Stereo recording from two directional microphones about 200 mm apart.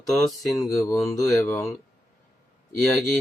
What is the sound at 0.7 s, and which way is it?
Speech, 15° left (ahead or behind).